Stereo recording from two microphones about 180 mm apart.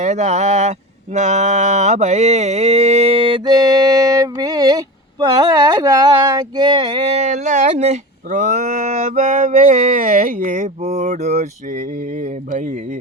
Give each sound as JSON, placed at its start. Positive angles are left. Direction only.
{"t": 0.0, "sound": "speech", "side_deg": -40}
{"t": 5.2, "sound": "a sound", "side_deg": -20}
{"t": 10.2, "sound": "speech", "side_deg": -40}